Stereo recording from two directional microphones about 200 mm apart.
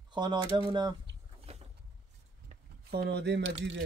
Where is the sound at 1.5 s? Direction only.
30° right (ahead or behind).